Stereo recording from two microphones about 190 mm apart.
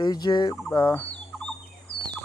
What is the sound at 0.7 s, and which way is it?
Turkey, 15° left (ahead or behind).